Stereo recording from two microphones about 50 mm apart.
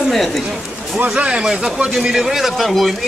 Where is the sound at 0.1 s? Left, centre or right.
Centre.